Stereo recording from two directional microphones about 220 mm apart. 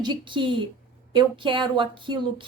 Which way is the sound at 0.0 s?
20° right (ahead or behind).